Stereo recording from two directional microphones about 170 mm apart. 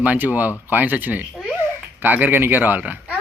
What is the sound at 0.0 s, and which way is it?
Speech, 10° right (ahead or behind).